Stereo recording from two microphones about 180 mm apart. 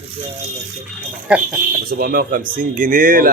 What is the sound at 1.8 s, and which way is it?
Speech, 55° right (ahead or behind).